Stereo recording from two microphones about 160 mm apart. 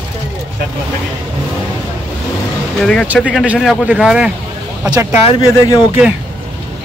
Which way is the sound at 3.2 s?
10° right (ahead or behind).